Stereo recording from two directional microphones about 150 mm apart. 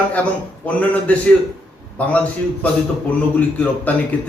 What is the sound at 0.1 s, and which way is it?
Speech, 10° left (ahead or behind).